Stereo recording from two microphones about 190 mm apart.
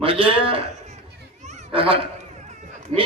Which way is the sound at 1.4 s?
35° right (ahead or behind).